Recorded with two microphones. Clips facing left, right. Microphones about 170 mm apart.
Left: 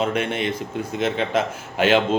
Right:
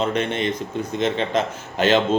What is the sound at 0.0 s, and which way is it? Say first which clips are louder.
A man's voice: right 1 dB; 5° left (ahead or behind).